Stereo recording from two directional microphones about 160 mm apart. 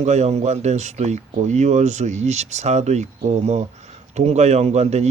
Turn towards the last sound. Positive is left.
turn(degrees=-45)  # may be behind; listen again after turning